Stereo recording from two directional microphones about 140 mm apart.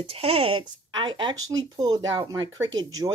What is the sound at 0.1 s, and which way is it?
Speech, 45° right (ahead or behind).